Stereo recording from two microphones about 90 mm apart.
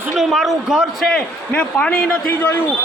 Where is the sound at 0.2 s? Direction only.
Centre (ahead or behind).